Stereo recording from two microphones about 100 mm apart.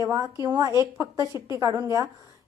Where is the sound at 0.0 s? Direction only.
35° right (ahead or behind).